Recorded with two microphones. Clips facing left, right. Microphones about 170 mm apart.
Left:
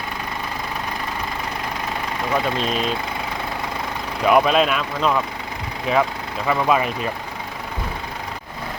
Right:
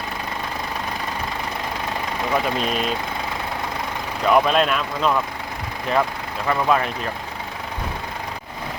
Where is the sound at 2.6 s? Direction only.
5° right (ahead or behind).